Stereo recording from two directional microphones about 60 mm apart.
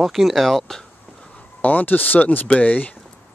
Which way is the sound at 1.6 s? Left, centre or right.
Left.